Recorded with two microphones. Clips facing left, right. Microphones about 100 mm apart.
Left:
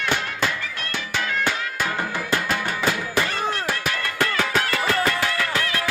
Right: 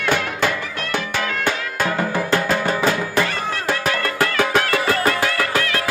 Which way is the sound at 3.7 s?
60° right (ahead or behind).